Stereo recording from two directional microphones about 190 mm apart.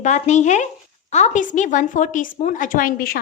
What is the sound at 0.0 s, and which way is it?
A woman's voice, 40° left (ahead or behind).